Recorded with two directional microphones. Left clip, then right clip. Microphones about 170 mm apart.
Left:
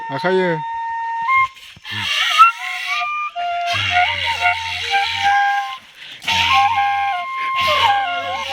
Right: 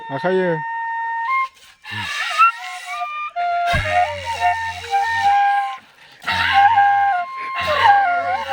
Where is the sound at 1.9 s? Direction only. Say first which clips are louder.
Left 5 dB; 5° right (ahead or behind).